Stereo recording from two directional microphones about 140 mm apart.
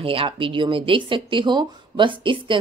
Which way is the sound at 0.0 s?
40° right (ahead or behind).